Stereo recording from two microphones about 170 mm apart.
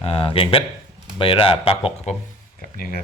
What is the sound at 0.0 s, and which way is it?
Speech, 30° left (ahead or behind).